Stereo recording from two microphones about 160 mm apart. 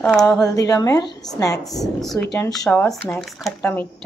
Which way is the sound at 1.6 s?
Centre (ahead or behind).